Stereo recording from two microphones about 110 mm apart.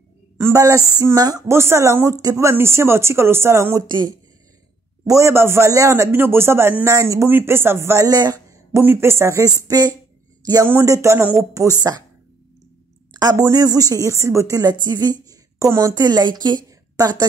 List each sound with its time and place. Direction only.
0.4 s a man's voice: 25° right (ahead or behind)
3.8 s speech: 40° right (ahead or behind)
5.0 s a man's voice: 25° right (ahead or behind)
8.7 s a man's voice: 25° right (ahead or behind)
10.7 s a man's voice: 25° right (ahead or behind)
13.1 s speech: 35° right (ahead or behind)
14.7 s a woman's voice: 40° right (ahead or behind)